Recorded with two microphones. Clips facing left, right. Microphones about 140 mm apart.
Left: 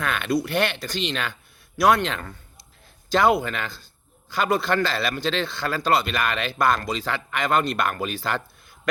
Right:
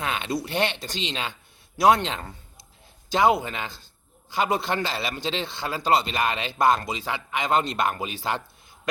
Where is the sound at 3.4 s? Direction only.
20° right (ahead or behind).